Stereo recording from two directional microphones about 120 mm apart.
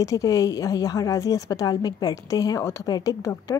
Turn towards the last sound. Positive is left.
turn(degrees=30)  # may be behind; listen again after turning